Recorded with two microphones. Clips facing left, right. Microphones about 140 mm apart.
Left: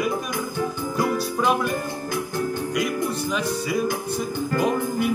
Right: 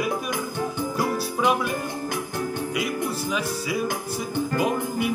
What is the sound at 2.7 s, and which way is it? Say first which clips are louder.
Music: left 3 dB; 5° right (ahead or behind).